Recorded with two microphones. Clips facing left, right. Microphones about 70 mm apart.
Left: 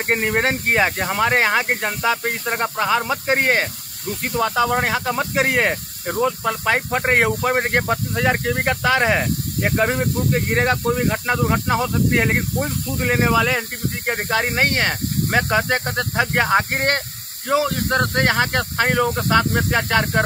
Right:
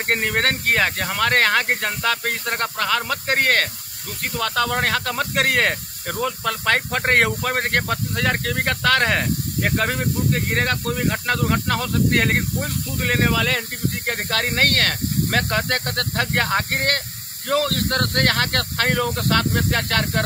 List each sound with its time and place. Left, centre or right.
0.0 s speech: centre